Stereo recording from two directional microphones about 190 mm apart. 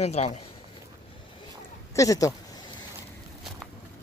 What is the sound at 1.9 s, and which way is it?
Speech, 15° left (ahead or behind).